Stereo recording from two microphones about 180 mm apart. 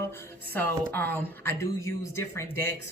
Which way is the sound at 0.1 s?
10° left (ahead or behind).